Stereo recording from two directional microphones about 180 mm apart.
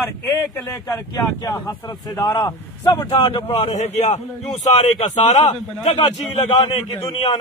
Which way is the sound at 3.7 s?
40° left (ahead or behind).